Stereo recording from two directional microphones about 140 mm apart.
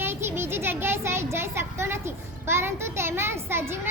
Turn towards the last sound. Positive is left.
turn(degrees=-15)  # may be behind; listen again after turning